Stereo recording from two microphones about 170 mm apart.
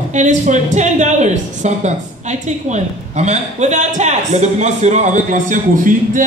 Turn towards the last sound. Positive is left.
turn(degrees=-50)  # may be behind; listen again after turning